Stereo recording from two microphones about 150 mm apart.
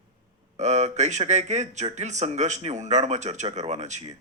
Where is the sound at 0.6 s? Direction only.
50° right (ahead or behind).